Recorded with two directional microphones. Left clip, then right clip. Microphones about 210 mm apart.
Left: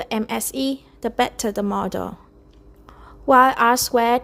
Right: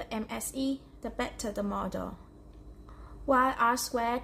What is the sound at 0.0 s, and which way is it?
A woman's voice, 45° left (ahead or behind).